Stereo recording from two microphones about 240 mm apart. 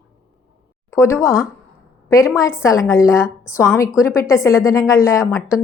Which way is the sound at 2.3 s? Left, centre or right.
Centre.